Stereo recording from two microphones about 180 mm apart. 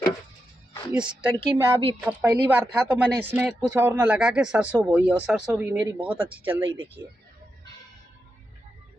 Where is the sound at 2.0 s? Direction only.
10° right (ahead or behind).